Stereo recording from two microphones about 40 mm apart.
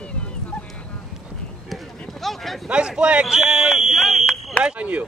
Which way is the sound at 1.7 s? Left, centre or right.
Centre.